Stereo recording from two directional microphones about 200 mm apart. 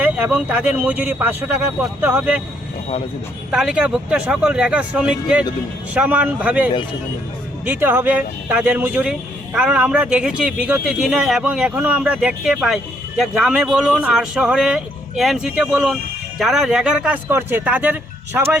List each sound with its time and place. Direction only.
0.0 s speech: 5° right (ahead or behind)
3.5 s speech: 5° right (ahead or behind)